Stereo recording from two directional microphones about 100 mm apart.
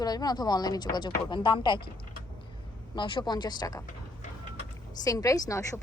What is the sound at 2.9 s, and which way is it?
Speech, 55° left (ahead or behind).